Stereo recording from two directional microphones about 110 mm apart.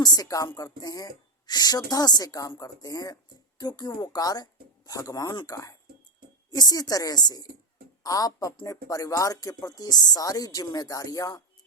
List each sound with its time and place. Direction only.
0.0 s speech: 35° left (ahead or behind)